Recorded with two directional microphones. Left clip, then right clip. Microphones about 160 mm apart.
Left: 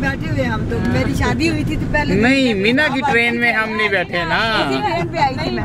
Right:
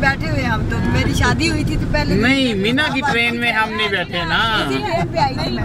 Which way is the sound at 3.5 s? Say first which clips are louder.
Left 1 dB; 85° right.